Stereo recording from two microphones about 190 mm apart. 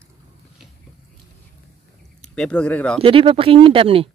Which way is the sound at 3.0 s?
30° right (ahead or behind).